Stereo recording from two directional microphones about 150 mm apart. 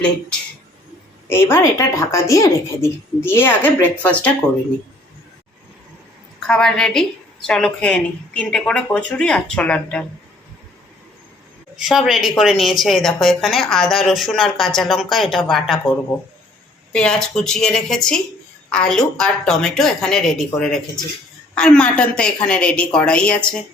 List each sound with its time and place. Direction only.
1.3 s speech: 15° left (ahead or behind)
6.5 s a woman's voice: 5° left (ahead or behind)
11.8 s a woman's voice: centre (ahead or behind)
16.9 s a woman's voice: 5° left (ahead or behind)